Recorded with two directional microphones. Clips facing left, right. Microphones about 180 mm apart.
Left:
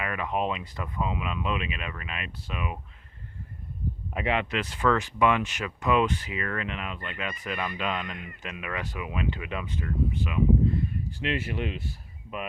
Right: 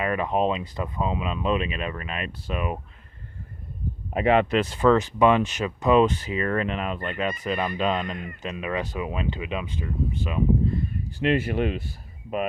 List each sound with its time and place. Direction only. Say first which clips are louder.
0.0 s speech: right 6 dB; 35° right (ahead or behind)
4.1 s speech: right 8 dB; 40° right (ahead or behind)
4.6 s speech: right 6 dB; 30° right (ahead or behind)
11.2 s speech: right 8 dB; 45° right (ahead or behind)